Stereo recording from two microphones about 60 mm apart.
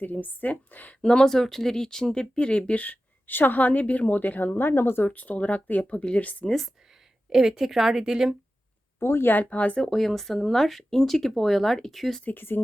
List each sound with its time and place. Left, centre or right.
0.0 s speech: left
1.0 s speech: centre; by 5.0 s left
5.0 s speech: left
7.3 s a woman's voice: centre
9.0 s speech: left
9.8 s speech: centre
12.2 s speech: left